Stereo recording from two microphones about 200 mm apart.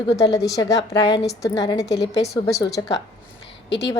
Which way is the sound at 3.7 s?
60° left (ahead or behind).